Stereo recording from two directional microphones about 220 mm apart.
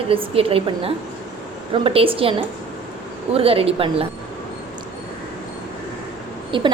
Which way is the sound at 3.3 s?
25° right (ahead or behind).